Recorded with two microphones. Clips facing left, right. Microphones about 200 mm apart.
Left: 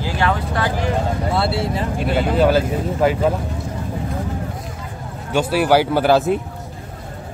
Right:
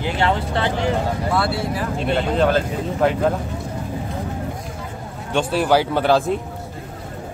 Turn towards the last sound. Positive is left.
turn(degrees=5)  # may be behind; listen again after turning